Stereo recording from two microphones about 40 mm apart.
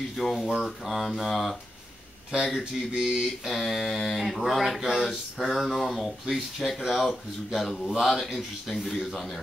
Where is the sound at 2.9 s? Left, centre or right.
Centre.